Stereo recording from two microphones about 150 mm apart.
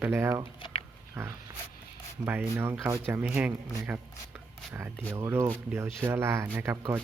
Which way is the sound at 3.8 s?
5° right (ahead or behind).